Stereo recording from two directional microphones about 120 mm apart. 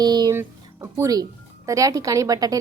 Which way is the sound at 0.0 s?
35° right (ahead or behind).